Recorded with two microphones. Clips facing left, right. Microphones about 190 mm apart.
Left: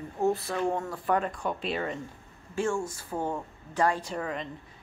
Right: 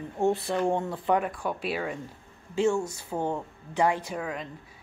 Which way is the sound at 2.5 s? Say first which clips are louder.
Right 4 dB; 20° right (ahead or behind).